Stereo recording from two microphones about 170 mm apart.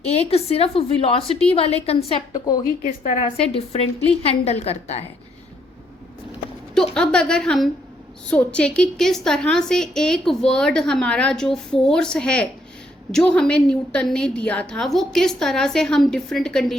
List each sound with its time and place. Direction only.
0.1 s a woman's voice: 35° left (ahead or behind)
2.8 s a woman's voice: 45° left (ahead or behind)
4.0 s a woman's voice: 35° left (ahead or behind)
6.7 s a woman's voice: 5° left (ahead or behind)